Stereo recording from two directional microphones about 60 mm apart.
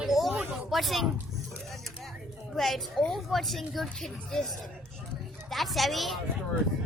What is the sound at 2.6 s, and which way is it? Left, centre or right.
Speech, centre.